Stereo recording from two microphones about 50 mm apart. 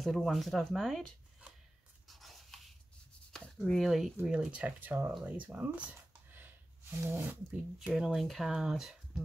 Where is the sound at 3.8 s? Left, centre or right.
Centre.